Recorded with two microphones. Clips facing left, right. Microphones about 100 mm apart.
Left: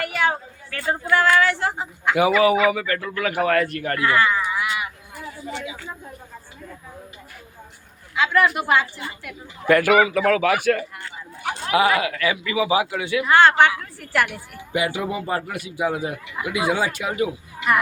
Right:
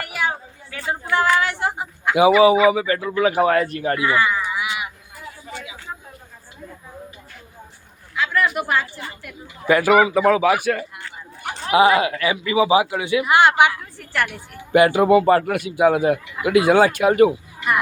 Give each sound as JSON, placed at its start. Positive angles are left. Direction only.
{"t": 0.0, "sound": "a sound", "side_deg": -5}
{"t": 1.1, "sound": "speech", "side_deg": -20}
{"t": 9.6, "sound": "speech", "side_deg": -10}
{"t": 11.7, "sound": "speech", "side_deg": -25}
{"t": 14.0, "sound": "a woman's voice", "side_deg": 5}
{"t": 14.7, "sound": "a man's voice", "side_deg": -60}